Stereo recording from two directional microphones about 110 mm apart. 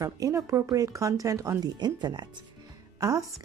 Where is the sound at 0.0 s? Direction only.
30° right (ahead or behind).